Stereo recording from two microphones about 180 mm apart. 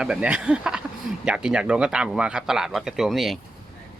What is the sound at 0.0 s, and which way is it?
Speech, 5° right (ahead or behind).